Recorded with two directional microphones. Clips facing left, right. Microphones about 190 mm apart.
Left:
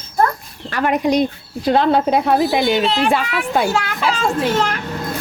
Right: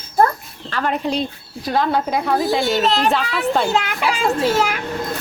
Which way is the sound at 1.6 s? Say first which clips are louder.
Left 5 dB; 25° left (ahead or behind).